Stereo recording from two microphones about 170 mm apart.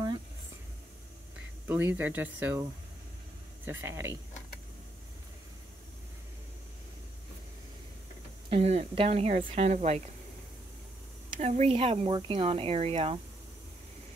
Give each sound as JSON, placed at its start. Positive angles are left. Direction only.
{"t": 1.7, "sound": "speech", "side_deg": -10}
{"t": 3.6, "sound": "speech", "side_deg": -15}
{"t": 8.5, "sound": "speech", "side_deg": -35}
{"t": 11.3, "sound": "speech", "side_deg": -40}